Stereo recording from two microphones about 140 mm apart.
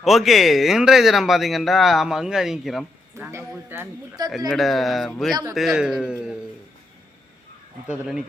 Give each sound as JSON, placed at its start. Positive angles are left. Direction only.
{"t": 0.0, "sound": "speech", "side_deg": 0}
{"t": 3.2, "sound": "a man's voice", "side_deg": -20}
{"t": 4.3, "sound": "speech", "side_deg": 0}
{"t": 5.3, "sound": "speech", "side_deg": -25}
{"t": 5.5, "sound": "speech", "side_deg": -5}
{"t": 7.9, "sound": "speech", "side_deg": -5}